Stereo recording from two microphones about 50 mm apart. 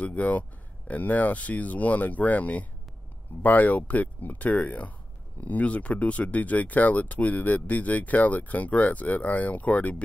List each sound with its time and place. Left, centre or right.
0.0 s speech: left